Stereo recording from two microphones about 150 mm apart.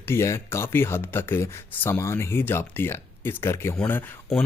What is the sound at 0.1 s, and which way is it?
Speech, 15° left (ahead or behind).